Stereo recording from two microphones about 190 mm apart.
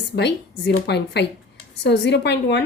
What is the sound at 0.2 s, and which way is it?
A woman's voice, 65° left (ahead or behind).